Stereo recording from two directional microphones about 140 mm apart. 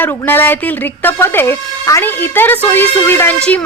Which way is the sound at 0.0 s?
15° left (ahead or behind).